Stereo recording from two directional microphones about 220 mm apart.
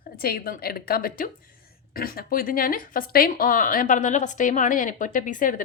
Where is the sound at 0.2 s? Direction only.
45° left (ahead or behind).